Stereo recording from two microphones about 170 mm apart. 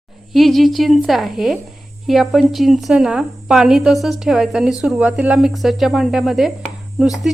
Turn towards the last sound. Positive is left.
turn(degrees=0)  # may be behind; listen again after turning